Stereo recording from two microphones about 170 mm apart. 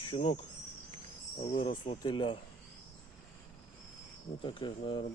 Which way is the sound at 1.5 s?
35° left (ahead or behind).